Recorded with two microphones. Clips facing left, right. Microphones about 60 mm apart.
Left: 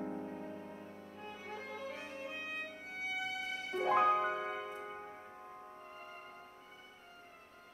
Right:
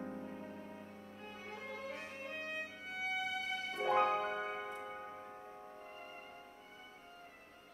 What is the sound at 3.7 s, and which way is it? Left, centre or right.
Music, left.